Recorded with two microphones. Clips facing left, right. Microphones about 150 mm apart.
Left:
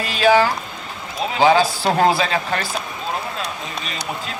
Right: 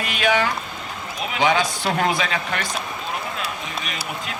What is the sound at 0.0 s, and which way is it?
Speech, 35° left (ahead or behind).